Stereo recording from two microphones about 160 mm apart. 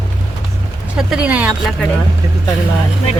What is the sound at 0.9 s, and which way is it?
Speech, 5° right (ahead or behind).